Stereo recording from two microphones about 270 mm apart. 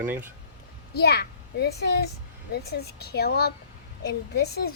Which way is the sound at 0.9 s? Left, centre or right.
Left.